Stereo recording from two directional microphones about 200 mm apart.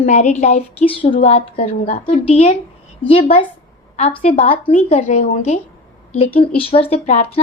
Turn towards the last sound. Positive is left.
turn(degrees=35)  # may be behind; listen again after turning